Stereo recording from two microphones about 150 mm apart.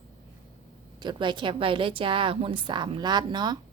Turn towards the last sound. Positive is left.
turn(degrees=-30)  # may be behind; listen again after turning